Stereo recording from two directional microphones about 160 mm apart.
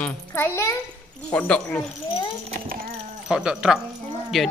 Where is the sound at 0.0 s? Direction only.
15° left (ahead or behind).